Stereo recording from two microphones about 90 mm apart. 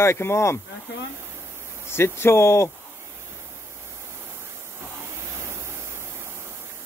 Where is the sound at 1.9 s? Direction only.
25° left (ahead or behind).